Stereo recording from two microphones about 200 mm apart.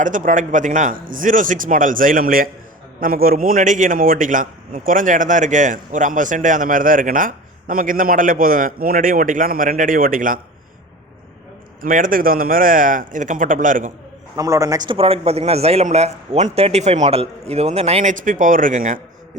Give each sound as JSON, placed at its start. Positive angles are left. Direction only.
{"t": 0.0, "sound": "a man's voice", "side_deg": -40}
{"t": 11.8, "sound": "a man's voice", "side_deg": -45}
{"t": 14.3, "sound": "a man's voice", "side_deg": -15}